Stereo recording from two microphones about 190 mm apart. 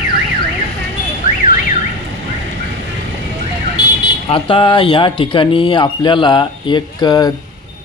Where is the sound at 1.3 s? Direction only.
45° left (ahead or behind).